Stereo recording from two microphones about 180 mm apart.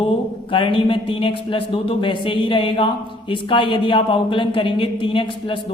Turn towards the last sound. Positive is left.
turn(degrees=30)  # may be behind; listen again after turning